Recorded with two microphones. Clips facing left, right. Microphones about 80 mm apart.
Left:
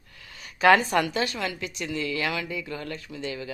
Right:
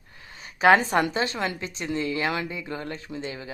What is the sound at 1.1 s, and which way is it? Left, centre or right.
Speech, right.